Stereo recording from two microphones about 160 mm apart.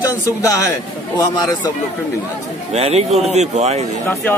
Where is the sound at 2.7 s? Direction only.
40° right (ahead or behind).